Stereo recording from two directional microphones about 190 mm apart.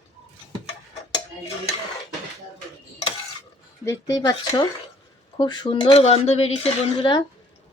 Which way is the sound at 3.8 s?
15° left (ahead or behind).